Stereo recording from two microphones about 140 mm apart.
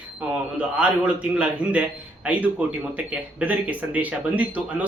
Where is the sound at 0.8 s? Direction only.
10° right (ahead or behind).